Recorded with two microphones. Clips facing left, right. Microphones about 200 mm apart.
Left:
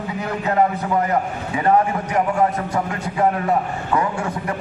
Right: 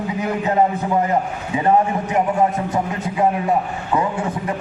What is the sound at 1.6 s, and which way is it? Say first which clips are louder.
Speech: right 1 dB; 20° right (ahead or behind).